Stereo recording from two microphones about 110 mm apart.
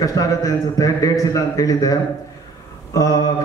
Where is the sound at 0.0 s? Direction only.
30° left (ahead or behind).